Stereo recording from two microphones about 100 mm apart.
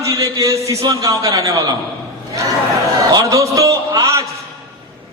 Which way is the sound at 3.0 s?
40° right (ahead or behind).